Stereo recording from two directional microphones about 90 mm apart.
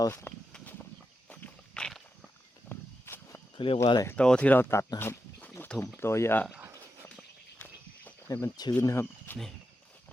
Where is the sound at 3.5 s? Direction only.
70° left (ahead or behind).